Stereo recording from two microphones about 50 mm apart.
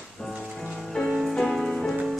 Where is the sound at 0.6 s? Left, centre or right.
Centre.